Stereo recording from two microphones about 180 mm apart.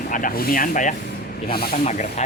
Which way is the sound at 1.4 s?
60° left (ahead or behind).